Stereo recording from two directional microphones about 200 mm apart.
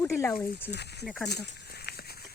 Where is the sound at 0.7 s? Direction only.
55° left (ahead or behind).